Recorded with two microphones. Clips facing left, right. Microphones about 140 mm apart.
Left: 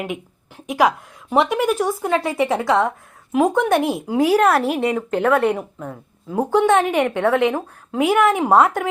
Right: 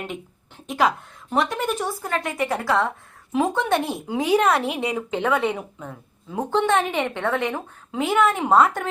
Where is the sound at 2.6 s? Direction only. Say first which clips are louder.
Left 3 dB; 20° left (ahead or behind).